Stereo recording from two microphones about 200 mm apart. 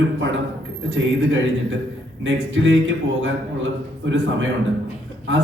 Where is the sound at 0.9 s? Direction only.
65° right (ahead or behind).